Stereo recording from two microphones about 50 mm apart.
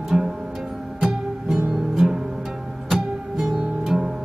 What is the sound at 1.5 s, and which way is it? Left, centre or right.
Music, centre.